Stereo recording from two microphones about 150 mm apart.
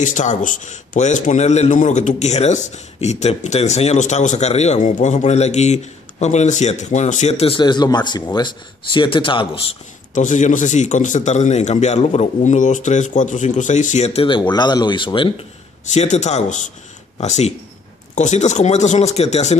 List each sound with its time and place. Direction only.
0.0 s a man's voice: 55° left (ahead or behind); by 9.5 s 35° left (ahead or behind)
10.1 s a man's voice: 55° left (ahead or behind); by 15.4 s 35° left (ahead or behind)
15.9 s a man's voice: 50° left (ahead or behind)